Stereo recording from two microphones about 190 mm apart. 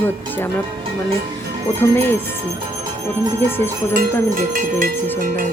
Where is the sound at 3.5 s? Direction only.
10° left (ahead or behind).